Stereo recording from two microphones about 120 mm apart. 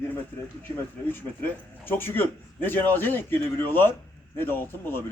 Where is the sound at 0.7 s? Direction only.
20° left (ahead or behind).